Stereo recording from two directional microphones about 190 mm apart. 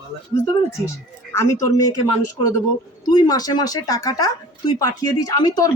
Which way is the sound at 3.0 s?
20° left (ahead or behind).